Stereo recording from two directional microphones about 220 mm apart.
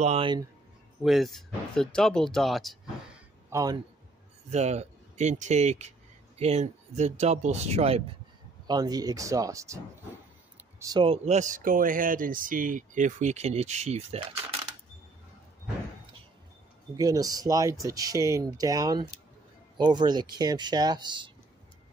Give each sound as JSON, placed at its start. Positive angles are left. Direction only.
{"t": 0.0, "sound": "speech", "side_deg": -25}
{"t": 1.0, "sound": "speech", "side_deg": 0}
{"t": 3.4, "sound": "speech", "side_deg": -15}
{"t": 4.5, "sound": "speech", "side_deg": -30}
{"t": 8.6, "sound": "speech", "side_deg": -15}
{"t": 16.9, "sound": "speech", "side_deg": -15}